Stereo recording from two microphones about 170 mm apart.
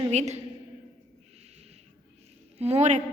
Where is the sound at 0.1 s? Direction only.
40° right (ahead or behind).